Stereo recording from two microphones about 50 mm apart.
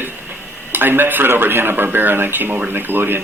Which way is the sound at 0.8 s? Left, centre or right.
Right.